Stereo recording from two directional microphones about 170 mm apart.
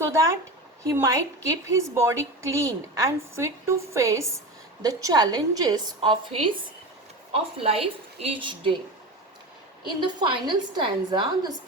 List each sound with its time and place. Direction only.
0.0 s a woman's voice: 15° right (ahead or behind)
10.1 s a woman's voice: 25° right (ahead or behind)